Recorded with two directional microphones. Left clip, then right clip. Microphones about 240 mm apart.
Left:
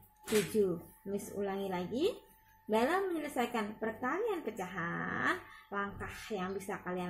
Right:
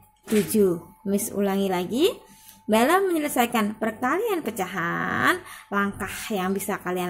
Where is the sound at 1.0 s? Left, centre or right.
Right.